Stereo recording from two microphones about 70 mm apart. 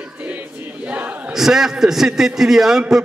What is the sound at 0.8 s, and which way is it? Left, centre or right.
Battle cry, right.